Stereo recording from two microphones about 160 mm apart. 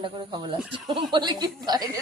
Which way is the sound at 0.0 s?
30° right (ahead or behind).